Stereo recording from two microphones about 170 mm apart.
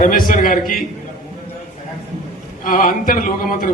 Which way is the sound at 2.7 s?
55° left (ahead or behind).